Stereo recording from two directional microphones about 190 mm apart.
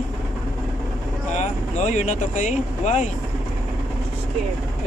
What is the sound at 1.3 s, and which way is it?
Speech, 40° left (ahead or behind).